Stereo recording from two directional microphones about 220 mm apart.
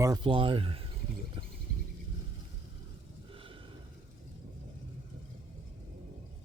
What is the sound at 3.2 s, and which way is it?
Snort, 25° right (ahead or behind).